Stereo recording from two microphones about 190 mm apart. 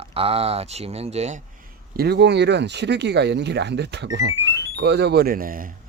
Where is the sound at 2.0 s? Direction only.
60° right (ahead or behind).